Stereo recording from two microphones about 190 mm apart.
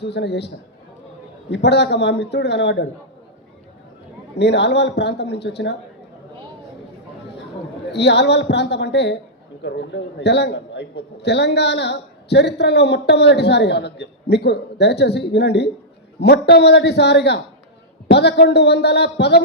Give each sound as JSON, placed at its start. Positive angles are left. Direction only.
{"t": 0.0, "sound": "a man's voice", "side_deg": 65}
{"t": 4.4, "sound": "a man's voice", "side_deg": 65}
{"t": 7.9, "sound": "a man's voice", "side_deg": 65}